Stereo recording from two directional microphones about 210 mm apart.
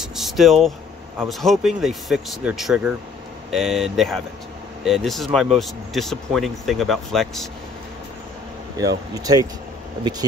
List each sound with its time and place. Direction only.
0.0 s a sound: centre (ahead or behind)
1.2 s speech: centre (ahead or behind)
8.7 s speech: 15° right (ahead or behind)